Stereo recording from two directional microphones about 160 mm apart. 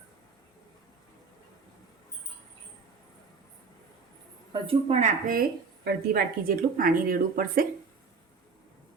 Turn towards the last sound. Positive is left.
turn(degrees=-65)  # may be behind; listen again after turning